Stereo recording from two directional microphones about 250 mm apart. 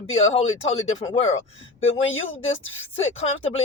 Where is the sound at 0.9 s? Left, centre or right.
Left.